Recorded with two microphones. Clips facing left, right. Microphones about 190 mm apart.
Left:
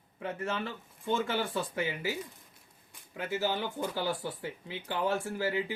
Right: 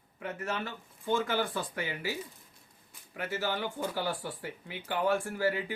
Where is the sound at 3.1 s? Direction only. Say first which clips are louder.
Left 2 dB; 20° left (ahead or behind).